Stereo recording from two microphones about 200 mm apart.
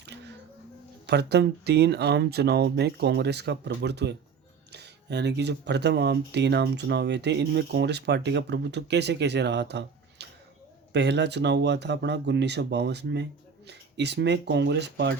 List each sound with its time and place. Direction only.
0.0 s music: 60° right (ahead or behind)
1.0 s speech: 55° right (ahead or behind)